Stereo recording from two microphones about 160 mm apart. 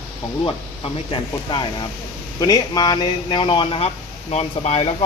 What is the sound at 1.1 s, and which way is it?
Speech, 30° left (ahead or behind).